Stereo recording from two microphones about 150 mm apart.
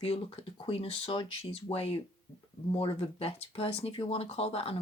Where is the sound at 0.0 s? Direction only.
40° left (ahead or behind).